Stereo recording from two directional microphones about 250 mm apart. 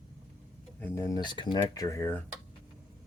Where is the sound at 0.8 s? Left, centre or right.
Centre.